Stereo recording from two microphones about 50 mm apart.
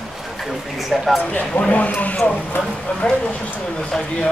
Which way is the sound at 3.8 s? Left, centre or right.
Centre.